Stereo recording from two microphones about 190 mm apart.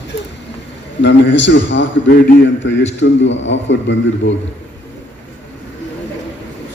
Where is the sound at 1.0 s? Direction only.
70° left (ahead or behind).